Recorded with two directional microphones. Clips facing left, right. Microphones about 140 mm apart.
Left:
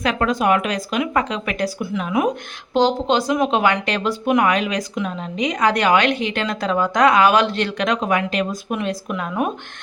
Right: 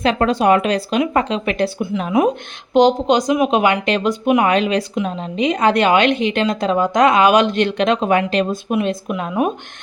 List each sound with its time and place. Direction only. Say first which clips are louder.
0.0 s a woman's voice: right 4 dB; 30° right (ahead or behind)
2.7 s a woman's voice: right 4 dB; 20° right (ahead or behind)
4.4 s a woman's voice: right 4 dB; 30° right (ahead or behind)
8.7 s a woman's voice: right 6 dB; 20° right (ahead or behind)